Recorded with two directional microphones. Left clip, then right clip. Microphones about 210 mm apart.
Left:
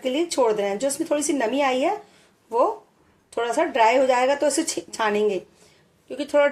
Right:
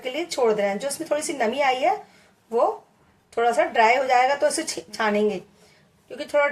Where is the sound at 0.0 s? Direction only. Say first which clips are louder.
Left 2 dB; 40° left (ahead or behind).